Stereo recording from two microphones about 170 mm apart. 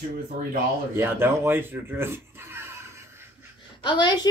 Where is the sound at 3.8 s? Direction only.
25° left (ahead or behind).